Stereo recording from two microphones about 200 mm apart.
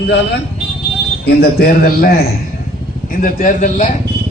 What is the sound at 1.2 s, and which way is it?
A man's voice, 50° left (ahead or behind).